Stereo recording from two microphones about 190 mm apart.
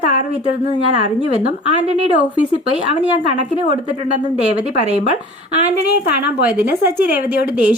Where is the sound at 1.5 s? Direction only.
35° right (ahead or behind).